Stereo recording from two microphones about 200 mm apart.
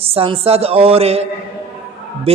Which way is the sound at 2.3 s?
30° right (ahead or behind).